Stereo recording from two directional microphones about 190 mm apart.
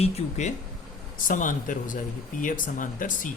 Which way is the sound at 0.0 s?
40° left (ahead or behind).